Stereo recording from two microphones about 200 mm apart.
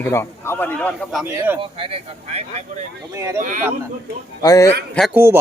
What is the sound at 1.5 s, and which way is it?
Speech, 25° right (ahead or behind).